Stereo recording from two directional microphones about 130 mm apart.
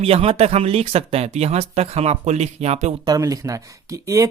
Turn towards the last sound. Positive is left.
turn(degrees=-25)  # may be behind; listen again after turning